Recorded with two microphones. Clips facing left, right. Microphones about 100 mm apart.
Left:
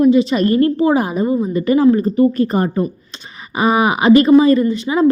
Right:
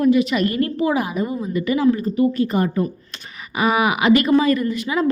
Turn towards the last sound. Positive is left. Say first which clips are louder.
# left 6 dB
turn(degrees=30)  # may be behind; listen again after turning